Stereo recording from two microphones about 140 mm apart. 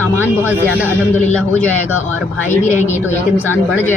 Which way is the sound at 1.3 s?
10° left (ahead or behind).